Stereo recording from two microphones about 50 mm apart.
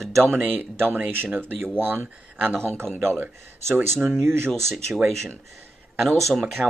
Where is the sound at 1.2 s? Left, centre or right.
Right.